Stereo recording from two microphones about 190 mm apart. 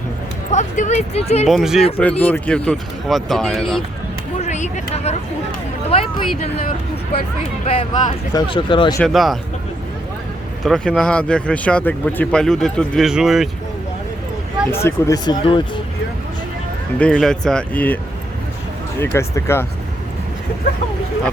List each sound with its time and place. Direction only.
0.5 s speech: 40° left (ahead or behind)
1.5 s speech: centre (ahead or behind)
4.4 s a sound: 40° left (ahead or behind)
5.9 s speech: 30° left (ahead or behind)
7.6 s speech: 30° left (ahead or behind)
9.0 s speech: centre (ahead or behind)
10.6 s speech: 5° left (ahead or behind)
14.7 s speech: 15° left (ahead or behind)
17.0 s speech: 5° left (ahead or behind)